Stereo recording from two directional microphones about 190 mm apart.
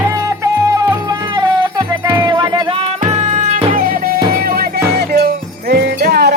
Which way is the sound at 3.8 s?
50° right (ahead or behind).